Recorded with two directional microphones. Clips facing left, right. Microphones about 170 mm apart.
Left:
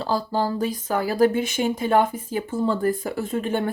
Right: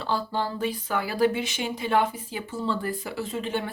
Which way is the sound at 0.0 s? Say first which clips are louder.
Left 4 dB; 40° left (ahead or behind).